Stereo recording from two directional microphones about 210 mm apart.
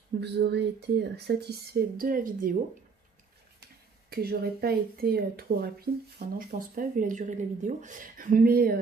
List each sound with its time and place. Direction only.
0.2 s speech: 55° right (ahead or behind)
4.1 s speech: 50° right (ahead or behind)